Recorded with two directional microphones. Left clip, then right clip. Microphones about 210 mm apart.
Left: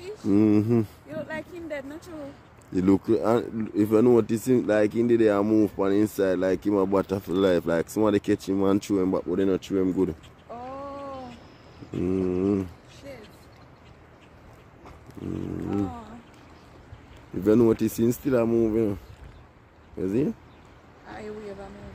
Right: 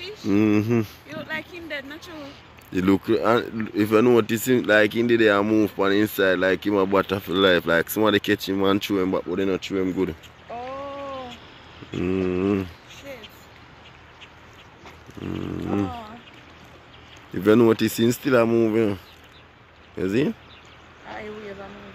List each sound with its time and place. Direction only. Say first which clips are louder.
0.3 s speech: right 1 dB; 10° left (ahead or behind)
1.1 s speech: right 2 dB; 40° left (ahead or behind)
2.7 s speech: right 1 dB; 10° left (ahead or behind)
9.3 s speech: even; 25° left (ahead or behind)
9.8 s speech: even; 15° left (ahead or behind)
12.0 s speech: right 2 dB; 5° left (ahead or behind)
17.5 s speech: right 3 dB; centre (ahead or behind)
20.0 s speech: right 3 dB; centre (ahead or behind)